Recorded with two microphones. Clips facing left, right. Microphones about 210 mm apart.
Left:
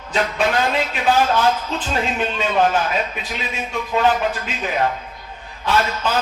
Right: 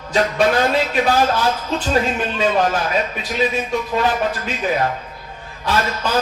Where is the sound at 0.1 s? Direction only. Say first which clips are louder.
Right 3 dB; 40° right (ahead or behind).